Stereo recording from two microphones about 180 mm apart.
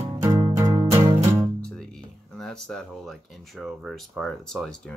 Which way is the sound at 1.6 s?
5° left (ahead or behind).